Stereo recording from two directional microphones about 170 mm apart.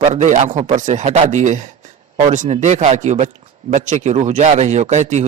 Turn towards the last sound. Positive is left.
turn(degrees=-40)  # may be behind; listen again after turning